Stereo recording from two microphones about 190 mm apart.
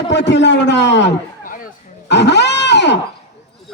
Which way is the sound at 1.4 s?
45° left (ahead or behind).